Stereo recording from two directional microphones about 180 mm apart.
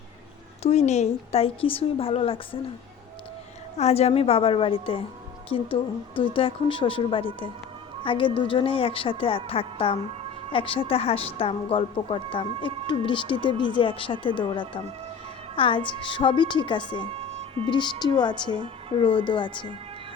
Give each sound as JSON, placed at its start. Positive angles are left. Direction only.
{"t": 0.6, "sound": "speech", "side_deg": 40}
{"t": 3.8, "sound": "speech", "side_deg": 35}
{"t": 17.2, "sound": "music", "side_deg": -35}
{"t": 18.0, "sound": "speech", "side_deg": 25}
{"t": 18.5, "sound": "a woman's voice", "side_deg": -30}
{"t": 19.0, "sound": "speech", "side_deg": 30}